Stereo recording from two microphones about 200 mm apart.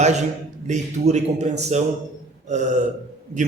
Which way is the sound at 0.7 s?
35° right (ahead or behind).